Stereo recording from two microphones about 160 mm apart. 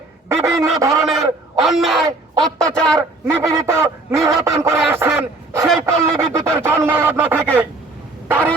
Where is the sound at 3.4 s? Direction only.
20° right (ahead or behind).